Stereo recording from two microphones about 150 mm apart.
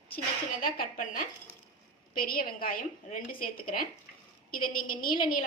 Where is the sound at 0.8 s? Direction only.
70° left (ahead or behind).